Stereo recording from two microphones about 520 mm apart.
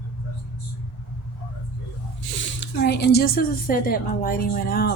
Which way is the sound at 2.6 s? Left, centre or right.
Centre.